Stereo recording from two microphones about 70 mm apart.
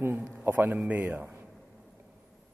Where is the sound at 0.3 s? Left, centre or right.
Right.